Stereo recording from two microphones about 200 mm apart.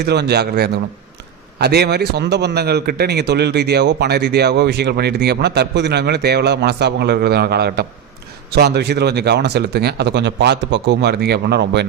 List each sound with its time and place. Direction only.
0.0 s a man's voice: 55° right (ahead or behind)